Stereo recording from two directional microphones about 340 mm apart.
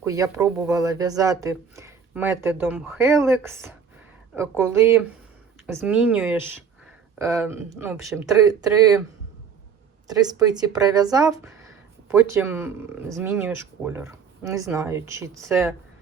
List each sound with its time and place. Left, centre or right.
0.0 s speech: centre
10.1 s speech: centre